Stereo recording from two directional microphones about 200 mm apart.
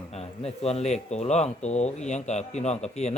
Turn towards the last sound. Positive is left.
turn(degrees=35)  # may be behind; listen again after turning